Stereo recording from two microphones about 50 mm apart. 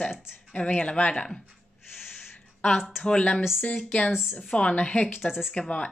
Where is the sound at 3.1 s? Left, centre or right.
Left.